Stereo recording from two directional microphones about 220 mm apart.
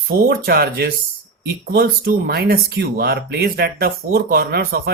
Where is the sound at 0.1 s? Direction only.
45° right (ahead or behind).